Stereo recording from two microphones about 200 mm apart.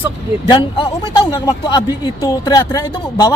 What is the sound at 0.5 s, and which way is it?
Speech, 25° left (ahead or behind).